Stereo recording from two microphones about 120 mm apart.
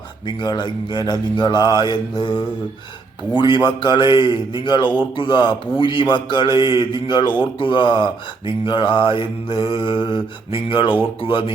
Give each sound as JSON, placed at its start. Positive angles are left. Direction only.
{"t": 0.3, "sound": "a man's voice", "side_deg": 35}